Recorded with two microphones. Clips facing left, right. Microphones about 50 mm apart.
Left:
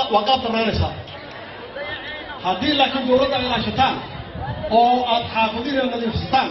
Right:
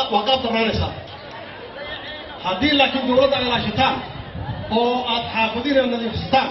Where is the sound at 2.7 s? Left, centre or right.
Right.